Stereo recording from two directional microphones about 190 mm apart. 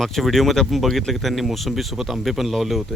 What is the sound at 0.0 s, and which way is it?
Speech, centre (ahead or behind).